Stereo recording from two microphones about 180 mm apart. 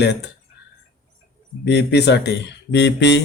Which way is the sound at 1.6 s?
70° left (ahead or behind).